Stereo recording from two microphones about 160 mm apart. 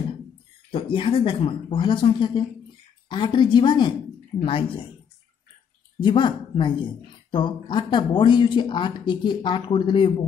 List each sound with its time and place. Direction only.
0.7 s speech: 35° left (ahead or behind)
5.9 s speech: 30° left (ahead or behind)